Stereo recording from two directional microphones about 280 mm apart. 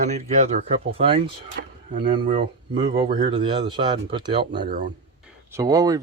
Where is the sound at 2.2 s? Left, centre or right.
Right.